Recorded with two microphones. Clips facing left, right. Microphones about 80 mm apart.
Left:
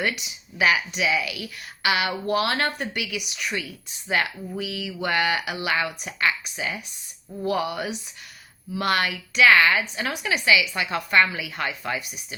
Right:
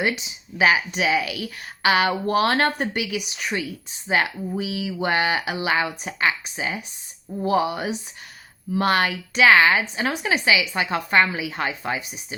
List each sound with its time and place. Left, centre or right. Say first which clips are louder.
0.0 s a woman's voice: right 3 dB; right